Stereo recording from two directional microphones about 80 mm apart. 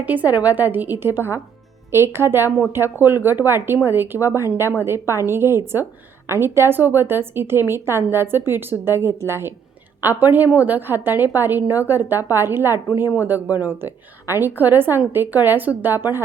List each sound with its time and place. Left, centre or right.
0.0 s a woman's voice: right